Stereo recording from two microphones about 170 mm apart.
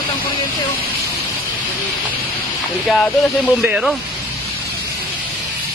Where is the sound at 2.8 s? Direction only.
5° left (ahead or behind).